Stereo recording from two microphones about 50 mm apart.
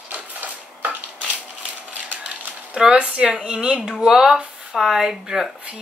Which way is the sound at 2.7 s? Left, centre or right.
Centre.